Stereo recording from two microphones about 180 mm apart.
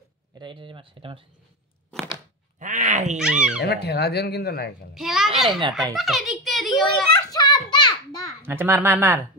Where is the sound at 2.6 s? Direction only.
45° right (ahead or behind).